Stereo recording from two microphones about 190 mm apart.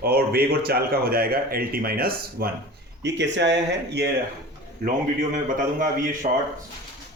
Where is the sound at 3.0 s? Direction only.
65° right (ahead or behind).